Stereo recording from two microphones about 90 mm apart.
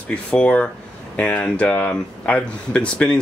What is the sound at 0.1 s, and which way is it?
Speech, 10° left (ahead or behind).